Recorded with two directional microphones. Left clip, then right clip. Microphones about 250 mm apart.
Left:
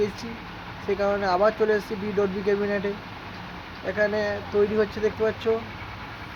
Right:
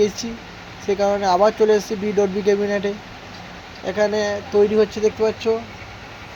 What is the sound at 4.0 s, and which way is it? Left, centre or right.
Speech, centre.